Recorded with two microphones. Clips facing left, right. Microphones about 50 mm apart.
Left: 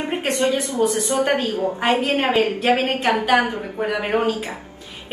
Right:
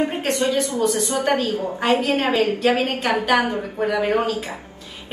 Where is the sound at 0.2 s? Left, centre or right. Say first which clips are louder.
Even; left.